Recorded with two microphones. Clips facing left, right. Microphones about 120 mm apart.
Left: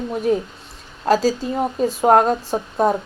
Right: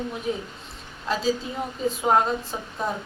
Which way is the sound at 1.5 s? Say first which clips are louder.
Left 7 dB; 50° left (ahead or behind).